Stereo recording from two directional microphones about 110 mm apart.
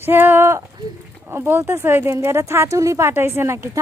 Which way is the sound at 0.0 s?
20° right (ahead or behind).